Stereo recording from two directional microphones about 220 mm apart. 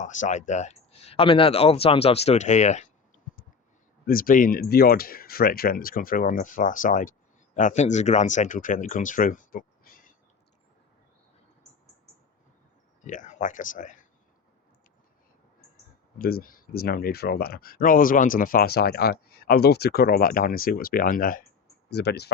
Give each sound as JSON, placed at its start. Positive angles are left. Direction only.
{"t": 0.0, "sound": "speech", "side_deg": 35}
{"t": 4.0, "sound": "speech", "side_deg": 40}
{"t": 13.1, "sound": "speech", "side_deg": 35}
{"t": 16.1, "sound": "speech", "side_deg": 40}